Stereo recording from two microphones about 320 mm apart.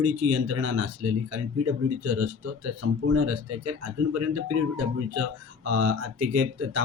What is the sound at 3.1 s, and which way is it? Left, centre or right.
Speech, right.